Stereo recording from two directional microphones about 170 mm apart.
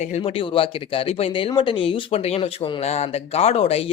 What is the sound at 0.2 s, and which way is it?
Speech, 30° left (ahead or behind).